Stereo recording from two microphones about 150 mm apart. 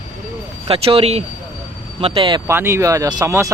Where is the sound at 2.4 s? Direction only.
15° right (ahead or behind).